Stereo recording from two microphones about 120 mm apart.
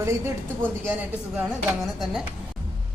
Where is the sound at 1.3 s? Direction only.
5° right (ahead or behind).